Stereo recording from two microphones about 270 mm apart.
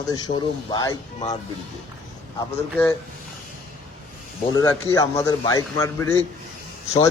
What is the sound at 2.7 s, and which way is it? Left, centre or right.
Speech, centre.